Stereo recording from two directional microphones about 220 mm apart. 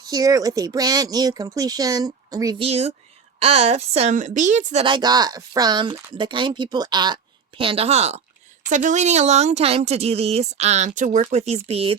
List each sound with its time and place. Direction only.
0.0 s speech: 15° right (ahead or behind)